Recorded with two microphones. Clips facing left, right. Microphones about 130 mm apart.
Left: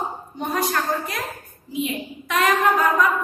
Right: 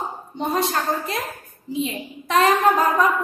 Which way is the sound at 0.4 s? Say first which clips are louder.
Right 1 dB; 25° right (ahead or behind).